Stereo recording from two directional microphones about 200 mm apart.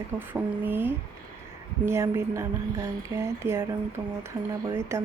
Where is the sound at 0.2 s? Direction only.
10° right (ahead or behind).